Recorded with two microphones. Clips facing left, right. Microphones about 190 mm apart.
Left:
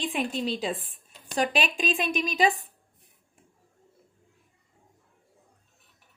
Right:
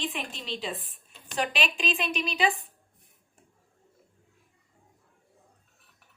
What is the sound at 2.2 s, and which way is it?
Speech, 40° left (ahead or behind).